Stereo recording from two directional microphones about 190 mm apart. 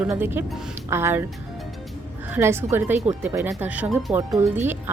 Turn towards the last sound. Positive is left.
turn(degrees=-10)  # may be behind; listen again after turning